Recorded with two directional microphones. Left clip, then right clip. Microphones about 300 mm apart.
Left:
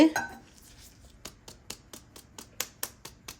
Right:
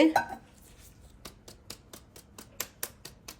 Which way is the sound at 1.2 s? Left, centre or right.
Centre.